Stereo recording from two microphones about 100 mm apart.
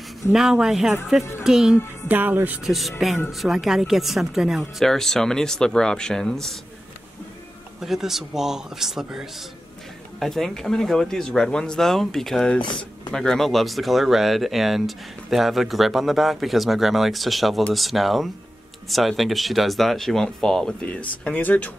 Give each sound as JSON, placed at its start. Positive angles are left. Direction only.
{"t": 0.3, "sound": "speech", "side_deg": -5}
{"t": 2.0, "sound": "speech", "side_deg": -20}
{"t": 2.6, "sound": "speech", "side_deg": 0}
{"t": 7.8, "sound": "speech", "side_deg": -5}